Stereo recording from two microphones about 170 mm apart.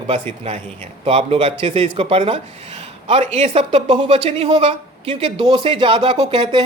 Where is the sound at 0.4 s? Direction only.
40° right (ahead or behind).